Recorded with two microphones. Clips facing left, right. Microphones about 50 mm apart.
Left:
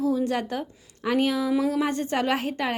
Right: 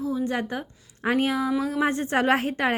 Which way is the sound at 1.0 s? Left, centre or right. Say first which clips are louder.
Even; right.